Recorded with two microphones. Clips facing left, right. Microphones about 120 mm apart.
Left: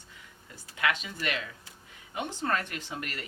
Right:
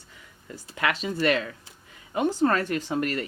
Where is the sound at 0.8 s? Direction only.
35° right (ahead or behind).